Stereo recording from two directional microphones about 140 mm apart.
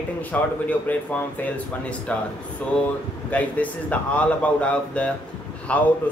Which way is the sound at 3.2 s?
10° left (ahead or behind).